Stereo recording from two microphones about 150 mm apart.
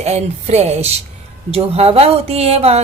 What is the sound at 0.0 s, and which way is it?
A woman's voice, 45° right (ahead or behind).